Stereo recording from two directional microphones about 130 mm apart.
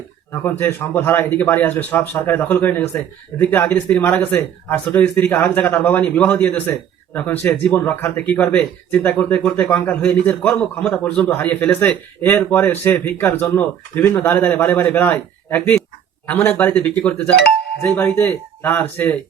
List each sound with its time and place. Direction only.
0.4 s a man's voice: 20° left (ahead or behind)